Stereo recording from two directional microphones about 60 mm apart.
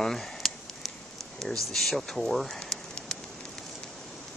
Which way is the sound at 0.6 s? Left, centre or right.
Centre.